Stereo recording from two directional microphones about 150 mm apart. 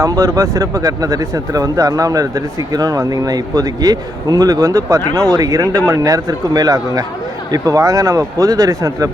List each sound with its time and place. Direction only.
0.0 s speech: 20° right (ahead or behind)